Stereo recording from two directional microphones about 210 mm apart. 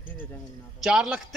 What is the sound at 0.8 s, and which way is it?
Speech, 5° right (ahead or behind).